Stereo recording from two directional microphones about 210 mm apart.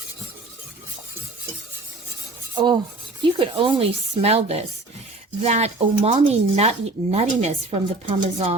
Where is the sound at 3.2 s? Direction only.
25° right (ahead or behind).